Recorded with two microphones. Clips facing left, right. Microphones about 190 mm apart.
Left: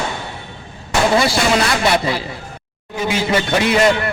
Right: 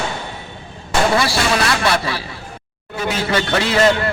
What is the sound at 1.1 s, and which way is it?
A man's voice, 20° left (ahead or behind).